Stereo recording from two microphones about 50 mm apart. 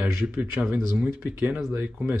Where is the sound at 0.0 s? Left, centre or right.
Right.